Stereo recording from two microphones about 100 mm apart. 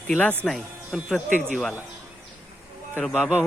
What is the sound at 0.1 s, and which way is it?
Speech, 15° left (ahead or behind).